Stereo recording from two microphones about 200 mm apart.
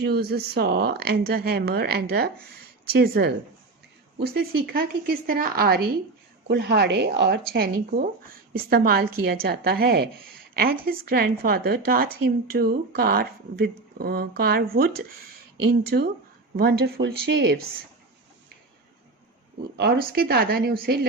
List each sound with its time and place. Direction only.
0.0 s a woman's voice: 55° right (ahead or behind)
19.7 s a woman's voice: 55° right (ahead or behind)